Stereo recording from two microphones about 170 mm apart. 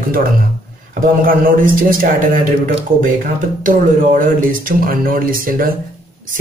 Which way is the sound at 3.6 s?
50° right (ahead or behind).